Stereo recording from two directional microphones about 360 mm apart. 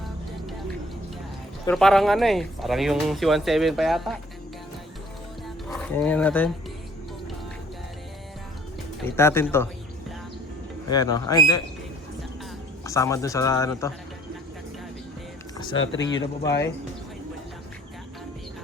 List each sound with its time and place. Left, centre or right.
1.6 s speech: centre
5.7 s speech: centre
9.0 s a man's voice: centre
10.8 s a man's voice: centre
12.8 s a man's voice: centre
15.9 s speech: left
16.1 s a man's voice: centre